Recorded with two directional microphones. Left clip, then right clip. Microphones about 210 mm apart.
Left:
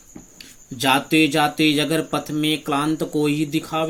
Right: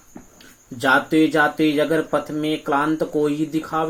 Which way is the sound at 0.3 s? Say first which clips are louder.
Left 3 dB; 60° left (ahead or behind).